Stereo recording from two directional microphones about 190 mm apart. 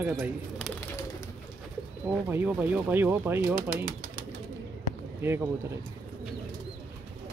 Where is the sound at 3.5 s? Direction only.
45° right (ahead or behind).